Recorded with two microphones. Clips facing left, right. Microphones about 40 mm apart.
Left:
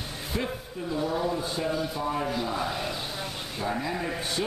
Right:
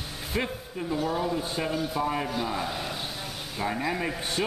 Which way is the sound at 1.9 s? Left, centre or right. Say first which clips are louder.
Right 2 dB; centre.